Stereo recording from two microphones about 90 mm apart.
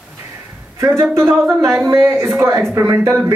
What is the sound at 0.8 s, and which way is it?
A man's voice, 30° right (ahead or behind).